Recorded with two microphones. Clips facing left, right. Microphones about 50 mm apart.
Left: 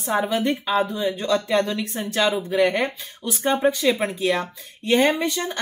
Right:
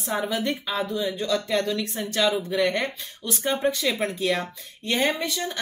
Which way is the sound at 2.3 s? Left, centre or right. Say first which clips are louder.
Left 4 dB; centre.